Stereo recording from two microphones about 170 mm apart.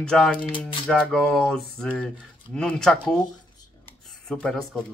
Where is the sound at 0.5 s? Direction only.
30° left (ahead or behind).